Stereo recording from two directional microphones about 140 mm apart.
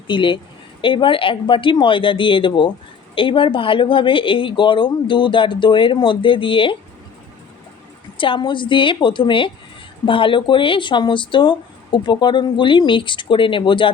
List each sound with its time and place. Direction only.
0.1 s speech: 35° left (ahead or behind)
8.2 s speech: 35° left (ahead or behind)